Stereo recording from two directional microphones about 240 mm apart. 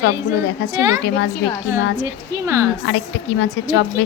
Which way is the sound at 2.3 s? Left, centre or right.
Centre.